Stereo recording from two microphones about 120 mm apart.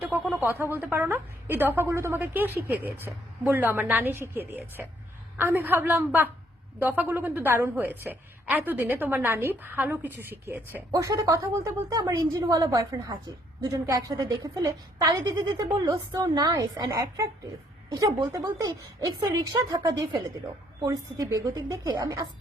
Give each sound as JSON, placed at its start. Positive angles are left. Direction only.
{"t": 0.3, "sound": "a woman's voice", "side_deg": -15}
{"t": 10.9, "sound": "a woman's voice", "side_deg": -30}